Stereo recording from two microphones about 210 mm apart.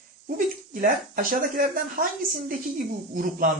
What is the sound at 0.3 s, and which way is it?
Speech, 40° right (ahead or behind).